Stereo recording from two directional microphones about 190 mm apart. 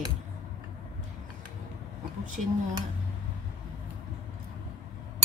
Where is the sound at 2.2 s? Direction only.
40° right (ahead or behind).